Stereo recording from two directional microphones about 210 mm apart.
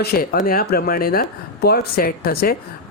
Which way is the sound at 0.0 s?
45° left (ahead or behind).